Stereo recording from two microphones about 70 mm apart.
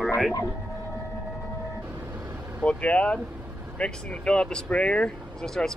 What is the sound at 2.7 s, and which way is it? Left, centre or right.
Speech, centre.